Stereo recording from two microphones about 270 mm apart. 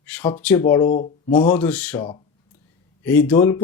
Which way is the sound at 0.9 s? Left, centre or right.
Left.